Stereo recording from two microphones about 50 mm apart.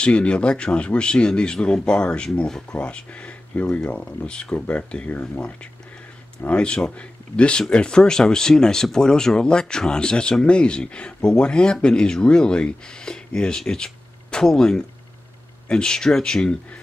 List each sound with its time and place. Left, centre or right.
0.0 s a man's voice: left
6.4 s a man's voice: left